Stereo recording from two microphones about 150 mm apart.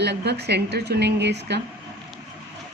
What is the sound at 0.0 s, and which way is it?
A woman's voice, 90° right.